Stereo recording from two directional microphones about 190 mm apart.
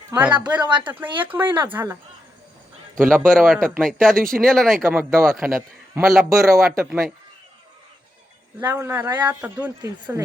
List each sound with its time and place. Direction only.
0.1 s a man's voice: 10° right (ahead or behind)
3.0 s speech: 5° right (ahead or behind)
4.1 s speech: 50° right (ahead or behind)
4.4 s a man's voice: centre (ahead or behind)
8.6 s a man's voice: 10° right (ahead or behind)
9.0 s a man's voice: 20° right (ahead or behind)